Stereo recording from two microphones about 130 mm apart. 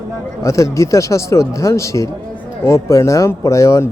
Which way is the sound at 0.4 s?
25° left (ahead or behind).